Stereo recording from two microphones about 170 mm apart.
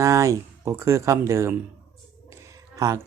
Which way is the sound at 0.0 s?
20° right (ahead or behind).